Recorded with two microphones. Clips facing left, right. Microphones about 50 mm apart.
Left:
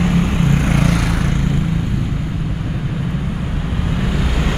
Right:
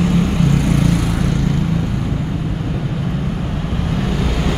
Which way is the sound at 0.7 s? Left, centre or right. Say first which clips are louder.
Even; left.